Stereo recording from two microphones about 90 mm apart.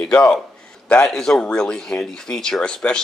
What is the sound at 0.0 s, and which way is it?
Speech, 10° left (ahead or behind).